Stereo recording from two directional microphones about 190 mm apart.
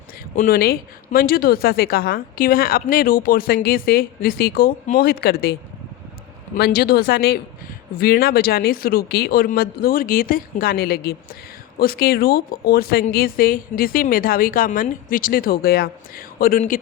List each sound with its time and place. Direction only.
0.3 s a woman's voice: 50° left (ahead or behind)
6.6 s a woman's voice: 55° left (ahead or behind)